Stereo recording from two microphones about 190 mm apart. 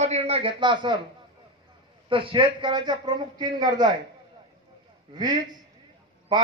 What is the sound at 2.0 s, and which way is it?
A man's voice, 30° right (ahead or behind).